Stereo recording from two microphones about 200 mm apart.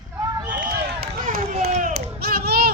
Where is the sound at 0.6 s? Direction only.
45° right (ahead or behind).